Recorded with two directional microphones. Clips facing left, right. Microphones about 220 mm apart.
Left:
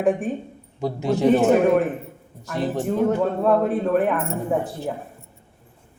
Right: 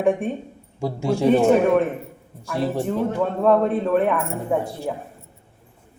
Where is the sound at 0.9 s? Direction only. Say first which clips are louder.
Left 1 dB; 20° left (ahead or behind).